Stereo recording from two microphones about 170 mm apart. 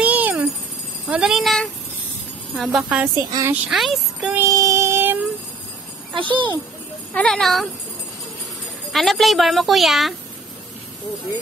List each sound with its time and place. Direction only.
0.0 s a sound: 10° right (ahead or behind)
1.0 s a woman's voice: 5° right (ahead or behind)
2.8 s a woman's voice: 10° right (ahead or behind)
3.2 s a woman's voice: 20° right (ahead or behind)
3.6 s speech: centre (ahead or behind)
4.4 s music: 20° right (ahead or behind)
6.1 s a child's voice: 30° right (ahead or behind)
7.2 s a woman's voice: centre (ahead or behind)
8.9 s a woman's voice: centre (ahead or behind)